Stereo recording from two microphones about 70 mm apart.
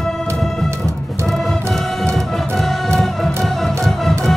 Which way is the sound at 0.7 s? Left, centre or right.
Right.